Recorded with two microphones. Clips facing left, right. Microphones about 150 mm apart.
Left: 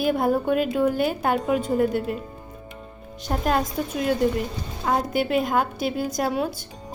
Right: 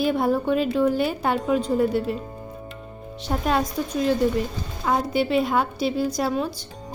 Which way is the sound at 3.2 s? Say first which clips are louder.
Even; centre (ahead or behind).